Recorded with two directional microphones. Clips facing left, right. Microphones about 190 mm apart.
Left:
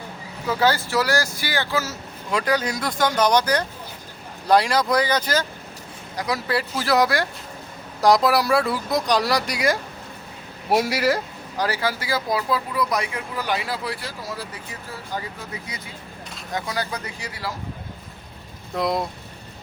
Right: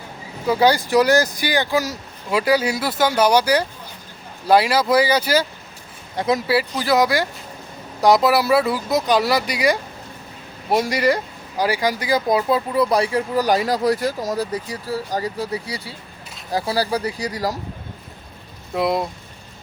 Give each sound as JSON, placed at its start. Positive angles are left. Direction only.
{"t": 0.4, "sound": "speech", "side_deg": -15}
{"t": 6.1, "sound": "speech", "side_deg": -25}
{"t": 6.5, "sound": "speech", "side_deg": 0}
{"t": 11.5, "sound": "speech", "side_deg": -10}
{"t": 18.7, "sound": "speech", "side_deg": -5}